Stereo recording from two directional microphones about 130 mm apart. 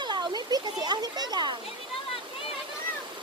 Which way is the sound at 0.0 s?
35° right (ahead or behind).